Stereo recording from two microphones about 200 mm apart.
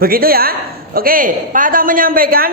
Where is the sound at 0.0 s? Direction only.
50° right (ahead or behind).